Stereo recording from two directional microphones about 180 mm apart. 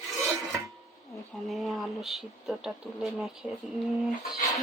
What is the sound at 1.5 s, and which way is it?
Speech, centre (ahead or behind).